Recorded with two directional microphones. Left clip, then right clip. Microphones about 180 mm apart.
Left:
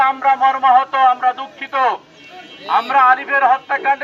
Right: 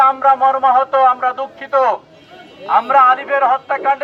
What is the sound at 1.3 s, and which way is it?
Speech, 25° right (ahead or behind).